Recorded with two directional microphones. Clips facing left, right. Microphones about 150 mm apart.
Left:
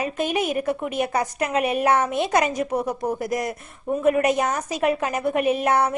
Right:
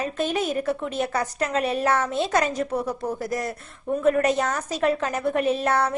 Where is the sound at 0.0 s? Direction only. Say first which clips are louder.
Left 1 dB; 15° left (ahead or behind).